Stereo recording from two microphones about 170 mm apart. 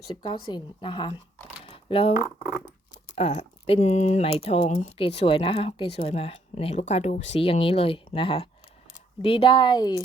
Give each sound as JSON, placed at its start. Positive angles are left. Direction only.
{"t": 0.2, "sound": "speech", "side_deg": 30}
{"t": 1.6, "sound": "a sound", "side_deg": 30}
{"t": 2.2, "sound": "speech", "side_deg": -5}
{"t": 3.2, "sound": "speech", "side_deg": 40}